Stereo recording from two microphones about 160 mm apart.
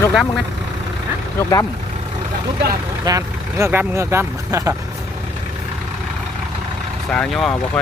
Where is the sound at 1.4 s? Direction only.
20° left (ahead or behind).